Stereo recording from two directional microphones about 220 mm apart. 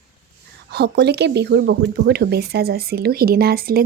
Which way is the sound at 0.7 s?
50° right (ahead or behind).